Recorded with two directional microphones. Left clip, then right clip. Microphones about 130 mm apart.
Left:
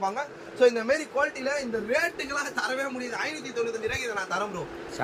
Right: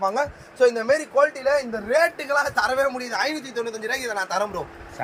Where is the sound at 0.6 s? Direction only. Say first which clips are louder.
Right 3 dB; 90° right; by 1.5 s 65° right (ahead or behind).